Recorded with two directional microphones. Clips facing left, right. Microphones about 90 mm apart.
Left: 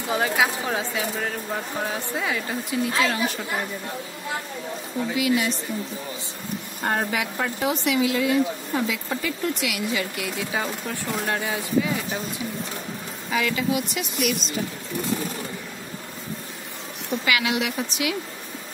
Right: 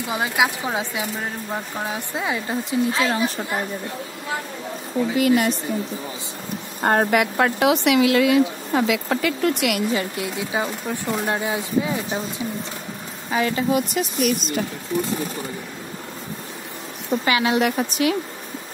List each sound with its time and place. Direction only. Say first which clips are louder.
0.1 s speech: even; 15° right (ahead or behind)
5.1 s speech: right 4 dB; 50° right (ahead or behind)
6.8 s speech: right 7 dB; 50° right (ahead or behind)
9.9 s speech: right 3 dB; 25° right (ahead or behind)
13.3 s speech: right 3 dB; 35° right (ahead or behind)
17.2 s speech: right 4 dB; 35° right (ahead or behind)
17.6 s speech: right 6 dB; 45° right (ahead or behind)